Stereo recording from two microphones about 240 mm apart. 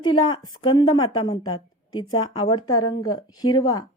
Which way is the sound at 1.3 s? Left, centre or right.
Centre.